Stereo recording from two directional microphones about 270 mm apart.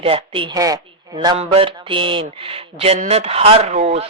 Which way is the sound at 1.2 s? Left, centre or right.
Centre.